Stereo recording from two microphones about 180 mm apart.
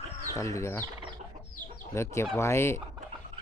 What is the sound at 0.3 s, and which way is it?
Speech, 15° left (ahead or behind).